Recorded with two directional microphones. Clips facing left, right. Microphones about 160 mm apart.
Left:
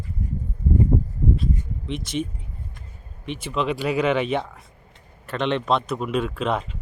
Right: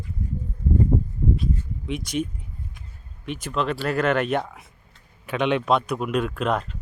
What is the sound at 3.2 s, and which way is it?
Speech, centre (ahead or behind).